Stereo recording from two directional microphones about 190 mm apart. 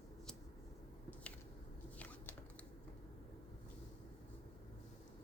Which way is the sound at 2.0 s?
10° left (ahead or behind).